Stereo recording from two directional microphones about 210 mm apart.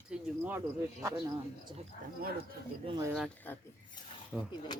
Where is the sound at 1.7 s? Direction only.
20° right (ahead or behind).